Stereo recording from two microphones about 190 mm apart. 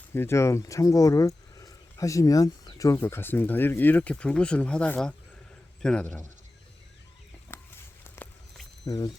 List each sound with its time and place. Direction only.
0.1 s speech: 15° left (ahead or behind)
7.5 s a sound: 10° left (ahead or behind)
8.0 s walk: 10° left (ahead or behind)
8.9 s speech: 20° left (ahead or behind)